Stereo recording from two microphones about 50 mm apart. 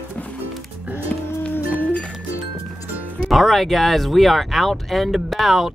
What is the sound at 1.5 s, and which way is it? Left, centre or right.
Music, left.